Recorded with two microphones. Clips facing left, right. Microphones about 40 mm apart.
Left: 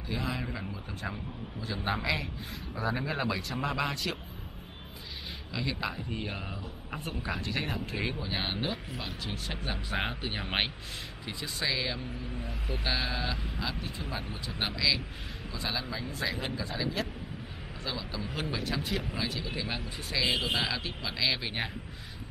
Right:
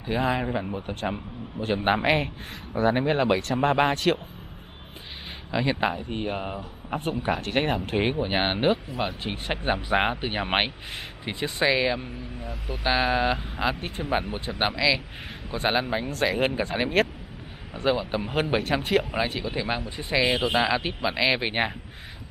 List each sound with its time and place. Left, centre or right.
0.0 s speech: right
5.5 s speech: right
14.8 s speech: right
15.5 s speech: right
19.4 s speech: right